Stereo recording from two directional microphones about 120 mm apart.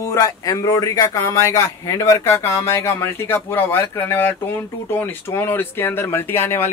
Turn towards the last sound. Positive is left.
turn(degrees=20)  # may be behind; listen again after turning